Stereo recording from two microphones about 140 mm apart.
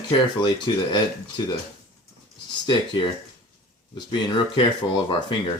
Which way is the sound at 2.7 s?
35° left (ahead or behind).